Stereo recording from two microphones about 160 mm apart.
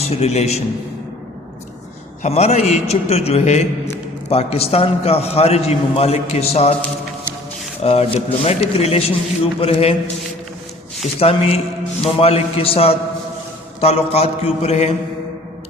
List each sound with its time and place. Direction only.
0.0 s a man's voice: 40° left (ahead or behind)
2.2 s a man's voice: 45° left (ahead or behind)
7.8 s a man's voice: 40° left (ahead or behind)
11.2 s a man's voice: 40° left (ahead or behind)